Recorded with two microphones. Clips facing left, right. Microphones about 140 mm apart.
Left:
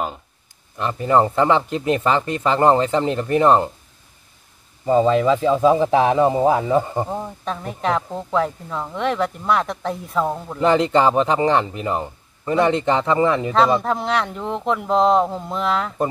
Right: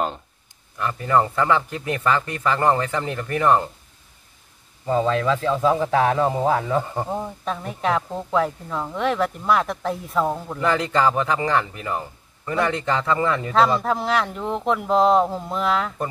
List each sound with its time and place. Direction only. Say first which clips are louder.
0.7 s speech: left 3 dB; 20° left (ahead or behind)
4.8 s speech: left 5 dB; 15° left (ahead or behind)
7.1 s speech: even; centre (ahead or behind)
10.6 s speech: left 5 dB; 25° left (ahead or behind)
13.8 s speech: left 1 dB; centre (ahead or behind)